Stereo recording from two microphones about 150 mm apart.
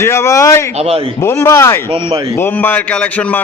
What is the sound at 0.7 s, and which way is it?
Speech, 40° right (ahead or behind).